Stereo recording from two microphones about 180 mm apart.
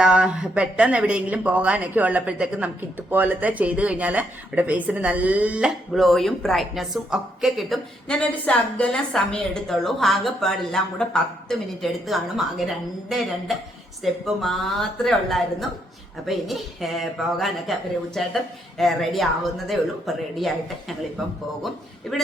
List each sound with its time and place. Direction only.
0.0 s a woman's voice: 5° right (ahead or behind)